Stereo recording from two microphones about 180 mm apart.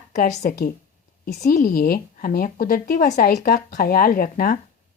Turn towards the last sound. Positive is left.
turn(degrees=55)  # may be behind; listen again after turning